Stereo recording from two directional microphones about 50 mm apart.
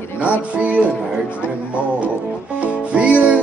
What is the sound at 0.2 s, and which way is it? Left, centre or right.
Speech, right.